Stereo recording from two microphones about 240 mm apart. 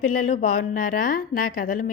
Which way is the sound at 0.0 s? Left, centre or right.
Left.